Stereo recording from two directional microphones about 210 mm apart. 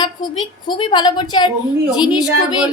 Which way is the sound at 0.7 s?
20° left (ahead or behind).